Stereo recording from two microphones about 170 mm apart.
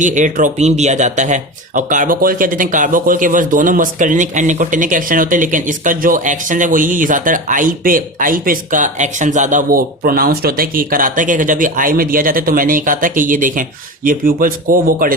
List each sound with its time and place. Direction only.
0.0 s speech: 45° right (ahead or behind)